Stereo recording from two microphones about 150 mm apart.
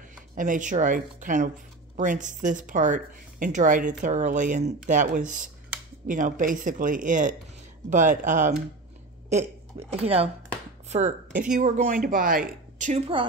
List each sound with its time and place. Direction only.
0.4 s a woman's voice: 55° right (ahead or behind)
9.3 s speech: 45° right (ahead or behind)
10.9 s a woman's voice: 50° right (ahead or behind)